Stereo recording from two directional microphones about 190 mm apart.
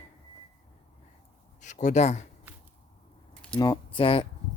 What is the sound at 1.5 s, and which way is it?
Speech, 40° left (ahead or behind).